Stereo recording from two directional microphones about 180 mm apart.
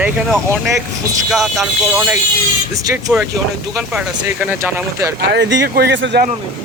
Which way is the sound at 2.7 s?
20° right (ahead or behind).